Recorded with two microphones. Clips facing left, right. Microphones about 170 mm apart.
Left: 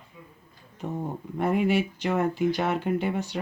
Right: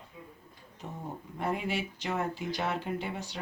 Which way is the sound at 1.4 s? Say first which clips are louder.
Left 9 dB; 60° left (ahead or behind).